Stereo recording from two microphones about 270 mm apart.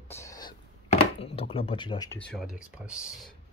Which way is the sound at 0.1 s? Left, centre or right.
Centre.